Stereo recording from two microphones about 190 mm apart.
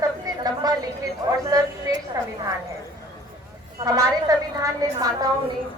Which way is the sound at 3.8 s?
20° right (ahead or behind).